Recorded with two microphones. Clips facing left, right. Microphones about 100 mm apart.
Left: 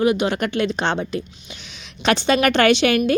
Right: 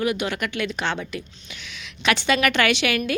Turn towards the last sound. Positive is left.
turn(degrees=30)  # may be behind; listen again after turning